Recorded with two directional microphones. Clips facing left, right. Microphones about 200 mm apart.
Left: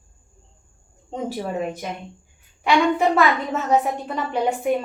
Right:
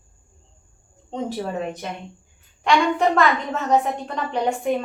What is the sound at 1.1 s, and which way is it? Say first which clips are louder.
A woman's voice: even; 10° left (ahead or behind).